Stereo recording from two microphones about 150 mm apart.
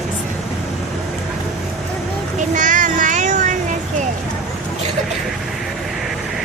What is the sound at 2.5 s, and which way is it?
Child singing, 60° right (ahead or behind).